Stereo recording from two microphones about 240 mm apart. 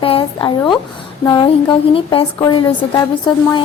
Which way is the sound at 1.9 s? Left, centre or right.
Left.